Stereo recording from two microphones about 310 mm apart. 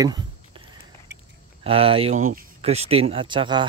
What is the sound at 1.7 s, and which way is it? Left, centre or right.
Speech, centre.